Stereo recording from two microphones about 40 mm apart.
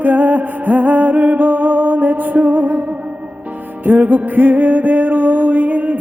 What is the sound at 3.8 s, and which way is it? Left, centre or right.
Music, right.